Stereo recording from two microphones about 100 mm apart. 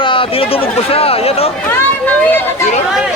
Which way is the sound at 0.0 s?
60° left (ahead or behind).